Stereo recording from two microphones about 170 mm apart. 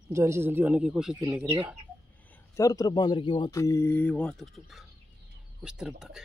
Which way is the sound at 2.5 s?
20° left (ahead or behind).